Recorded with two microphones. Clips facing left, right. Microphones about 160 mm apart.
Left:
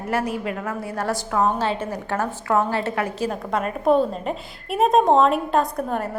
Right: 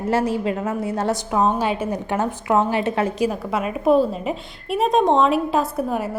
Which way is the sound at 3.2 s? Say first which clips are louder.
Right 2 dB; 5° right (ahead or behind).